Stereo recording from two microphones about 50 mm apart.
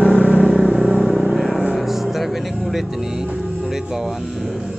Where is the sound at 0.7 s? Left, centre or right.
Centre.